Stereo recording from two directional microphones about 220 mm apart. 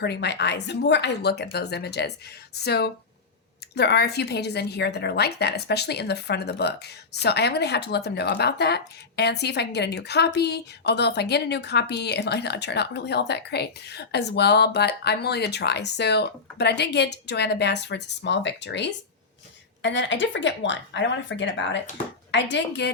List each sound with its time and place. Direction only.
0.0 s a woman's voice: 50° left (ahead or behind)